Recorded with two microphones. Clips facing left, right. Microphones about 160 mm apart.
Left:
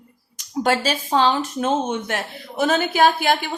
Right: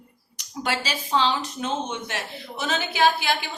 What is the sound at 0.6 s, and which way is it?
Speech, 45° left (ahead or behind).